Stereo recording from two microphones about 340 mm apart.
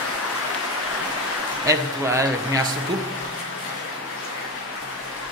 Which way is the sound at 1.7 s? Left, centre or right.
Centre.